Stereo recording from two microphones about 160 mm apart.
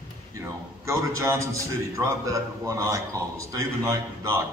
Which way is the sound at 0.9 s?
20° right (ahead or behind).